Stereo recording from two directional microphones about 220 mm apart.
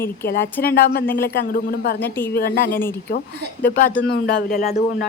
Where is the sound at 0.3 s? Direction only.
45° left (ahead or behind).